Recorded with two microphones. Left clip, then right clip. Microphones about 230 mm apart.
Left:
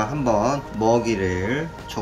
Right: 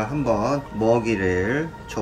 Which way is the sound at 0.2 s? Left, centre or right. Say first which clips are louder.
Left 1 dB; centre.